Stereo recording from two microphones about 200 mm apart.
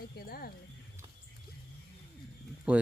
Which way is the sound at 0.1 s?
50° left (ahead or behind).